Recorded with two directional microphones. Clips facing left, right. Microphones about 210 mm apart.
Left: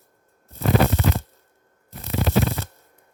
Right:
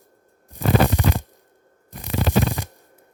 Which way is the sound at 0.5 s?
15° right (ahead or behind).